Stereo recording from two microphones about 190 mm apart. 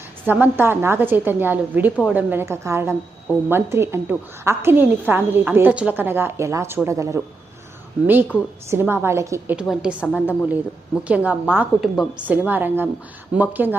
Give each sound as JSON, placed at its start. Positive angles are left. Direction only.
{"t": 0.3, "sound": "a woman's voice", "side_deg": -10}
{"t": 8.7, "sound": "a woman's voice", "side_deg": -10}
{"t": 9.6, "sound": "a woman's voice", "side_deg": -5}